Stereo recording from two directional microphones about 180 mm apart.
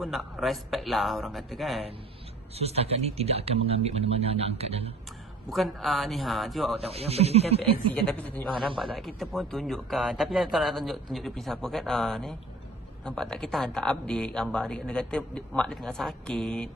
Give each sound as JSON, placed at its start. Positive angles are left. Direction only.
{"t": 0.0, "sound": "speech", "side_deg": 0}
{"t": 2.6, "sound": "speech", "side_deg": -35}
{"t": 5.5, "sound": "speech", "side_deg": 0}
{"t": 6.9, "sound": "speech", "side_deg": -35}
{"t": 7.9, "sound": "speech", "side_deg": 5}